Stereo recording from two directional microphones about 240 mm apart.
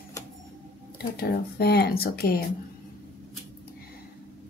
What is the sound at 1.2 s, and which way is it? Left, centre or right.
Speech, left.